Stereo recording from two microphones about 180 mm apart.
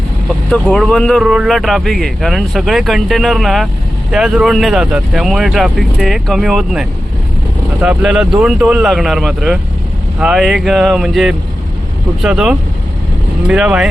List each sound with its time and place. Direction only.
0.7 s speech: 5° left (ahead or behind)